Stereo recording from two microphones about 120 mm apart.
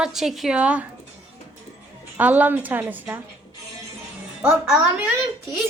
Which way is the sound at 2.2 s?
15° right (ahead or behind).